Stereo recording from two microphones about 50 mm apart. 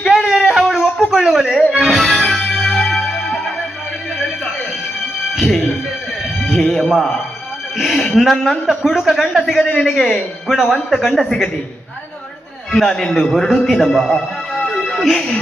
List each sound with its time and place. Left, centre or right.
0.2 s a sound: centre
1.7 s music: centre
5.3 s music: centre
7.8 s speech: centre
12.7 s a man's voice: centre
14.7 s music: centre